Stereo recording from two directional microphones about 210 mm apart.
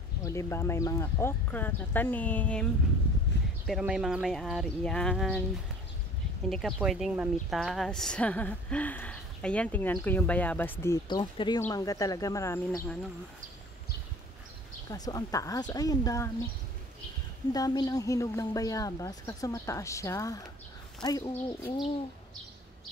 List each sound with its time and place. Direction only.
0.2 s a woman's voice: 15° left (ahead or behind)
6.5 s a woman's voice: centre (ahead or behind)
14.9 s a woman's voice: 15° left (ahead or behind)
17.5 s a woman's voice: 15° left (ahead or behind)